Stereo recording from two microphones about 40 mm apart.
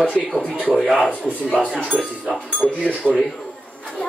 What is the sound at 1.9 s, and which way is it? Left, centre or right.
Speech, right.